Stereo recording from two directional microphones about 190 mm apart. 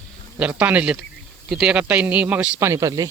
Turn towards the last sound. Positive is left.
turn(degrees=-15)  # may be behind; listen again after turning